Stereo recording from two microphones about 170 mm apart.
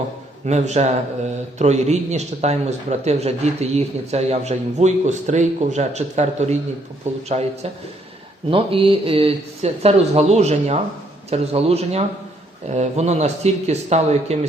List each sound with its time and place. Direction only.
0.4 s a man's voice: 40° right (ahead or behind)